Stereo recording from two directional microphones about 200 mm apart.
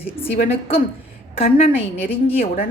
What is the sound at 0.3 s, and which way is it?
A woman's voice, 30° left (ahead or behind).